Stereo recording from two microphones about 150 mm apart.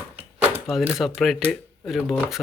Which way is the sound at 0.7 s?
Centre (ahead or behind).